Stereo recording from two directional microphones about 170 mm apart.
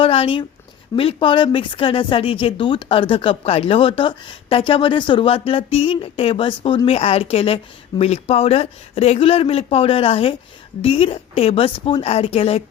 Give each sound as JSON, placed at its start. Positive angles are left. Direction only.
{"t": 0.0, "sound": "speech", "side_deg": 30}